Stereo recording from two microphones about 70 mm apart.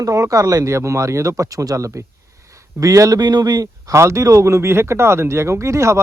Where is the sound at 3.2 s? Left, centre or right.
Right.